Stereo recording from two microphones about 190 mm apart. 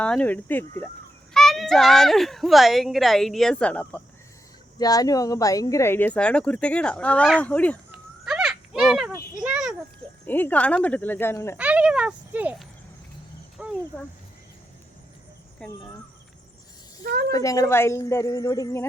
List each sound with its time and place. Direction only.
0.0 s a child's voice: 5° left (ahead or behind)
4.8 s speech: 20° left (ahead or behind)
8.2 s a sound: centre (ahead or behind)
10.2 s speech: 10° left (ahead or behind)
11.5 s speech: 5° right (ahead or behind)
13.6 s a sound: 5° right (ahead or behind)
15.6 s a child's voice: 5° left (ahead or behind)
17.0 s speech: 50° right (ahead or behind)
17.3 s speech: 20° left (ahead or behind)